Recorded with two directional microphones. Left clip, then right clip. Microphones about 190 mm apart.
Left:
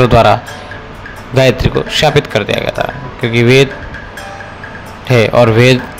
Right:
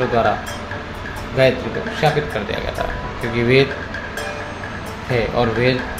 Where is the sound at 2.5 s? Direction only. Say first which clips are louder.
Left 8 dB; 35° left (ahead or behind).